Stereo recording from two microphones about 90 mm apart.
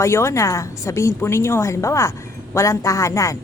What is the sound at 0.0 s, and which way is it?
A woman's voice, 30° left (ahead or behind).